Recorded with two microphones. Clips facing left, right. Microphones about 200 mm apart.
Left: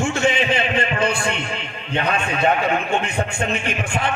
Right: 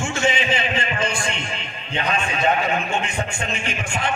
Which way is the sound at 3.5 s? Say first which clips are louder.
Left 4 dB; 60° left (ahead or behind).